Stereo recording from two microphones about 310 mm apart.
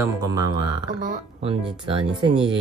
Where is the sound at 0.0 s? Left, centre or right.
Centre.